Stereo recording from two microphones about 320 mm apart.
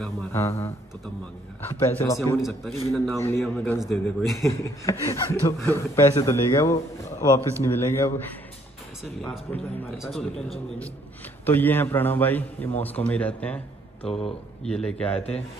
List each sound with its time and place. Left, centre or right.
0.0 s a man's voice: centre
11.4 s a man's voice: centre
14.6 s a man's voice: centre
15.1 s a man's voice: centre